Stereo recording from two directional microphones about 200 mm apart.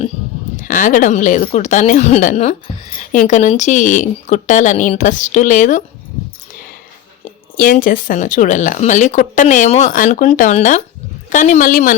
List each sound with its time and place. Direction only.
0.6 s speech: 40° left (ahead or behind)
6.5 s a sound: 45° left (ahead or behind)
7.5 s speech: 45° left (ahead or behind)